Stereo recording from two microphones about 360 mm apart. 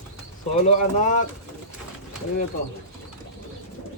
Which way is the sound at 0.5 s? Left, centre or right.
Centre.